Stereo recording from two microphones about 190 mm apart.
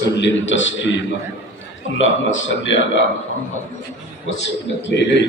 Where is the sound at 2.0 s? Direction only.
85° left.